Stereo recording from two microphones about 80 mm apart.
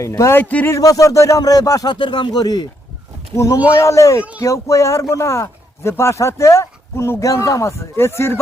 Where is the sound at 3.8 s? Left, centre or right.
Left.